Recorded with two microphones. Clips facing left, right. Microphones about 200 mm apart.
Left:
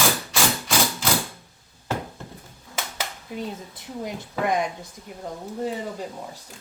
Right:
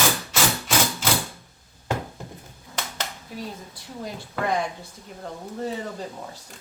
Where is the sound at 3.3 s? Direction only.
20° left (ahead or behind).